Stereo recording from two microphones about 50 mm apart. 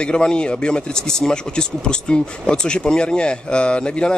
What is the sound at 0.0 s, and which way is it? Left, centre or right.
Speech, centre.